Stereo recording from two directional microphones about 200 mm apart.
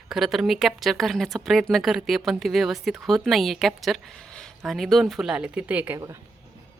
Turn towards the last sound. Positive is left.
turn(degrees=-15)  # may be behind; listen again after turning